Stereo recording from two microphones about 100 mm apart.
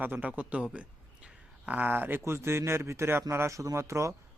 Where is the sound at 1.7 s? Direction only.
15° right (ahead or behind).